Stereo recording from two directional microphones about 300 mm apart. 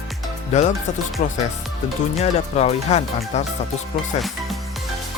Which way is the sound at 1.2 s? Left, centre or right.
Left.